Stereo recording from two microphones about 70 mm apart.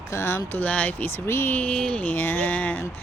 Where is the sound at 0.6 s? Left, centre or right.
Left.